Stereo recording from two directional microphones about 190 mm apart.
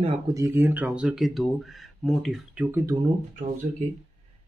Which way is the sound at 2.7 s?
15° right (ahead or behind).